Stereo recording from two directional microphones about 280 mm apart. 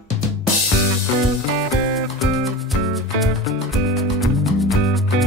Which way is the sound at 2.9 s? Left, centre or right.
Centre.